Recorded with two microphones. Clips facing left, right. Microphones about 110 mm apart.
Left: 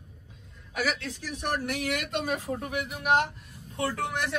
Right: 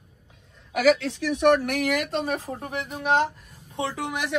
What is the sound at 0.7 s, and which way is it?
Speech, 85° right.